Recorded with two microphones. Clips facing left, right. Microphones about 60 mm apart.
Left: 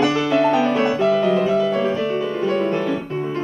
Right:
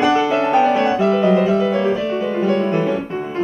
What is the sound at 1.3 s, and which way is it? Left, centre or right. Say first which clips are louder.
Music: right 2 dB; centre.